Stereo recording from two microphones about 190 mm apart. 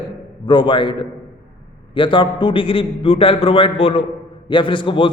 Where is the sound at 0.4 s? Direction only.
25° left (ahead or behind).